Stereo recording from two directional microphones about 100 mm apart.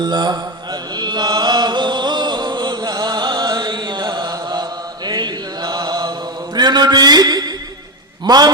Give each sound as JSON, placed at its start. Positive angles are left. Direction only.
{"t": 0.0, "sound": "mantra", "side_deg": -45}
{"t": 8.2, "sound": "a man's voice", "side_deg": -40}